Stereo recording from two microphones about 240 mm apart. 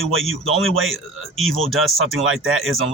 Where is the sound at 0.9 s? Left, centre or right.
Centre.